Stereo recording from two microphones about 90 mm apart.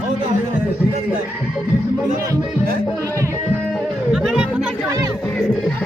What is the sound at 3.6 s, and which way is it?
Music, 5° left (ahead or behind).